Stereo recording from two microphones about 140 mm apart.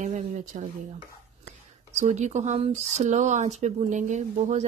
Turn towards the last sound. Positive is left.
turn(degrees=-55)  # may be behind; listen again after turning